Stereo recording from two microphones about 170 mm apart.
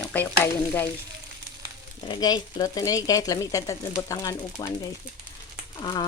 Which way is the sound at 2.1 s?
25° left (ahead or behind).